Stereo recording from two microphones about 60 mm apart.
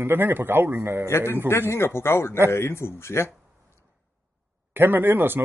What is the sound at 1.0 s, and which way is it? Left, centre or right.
A man's voice, left.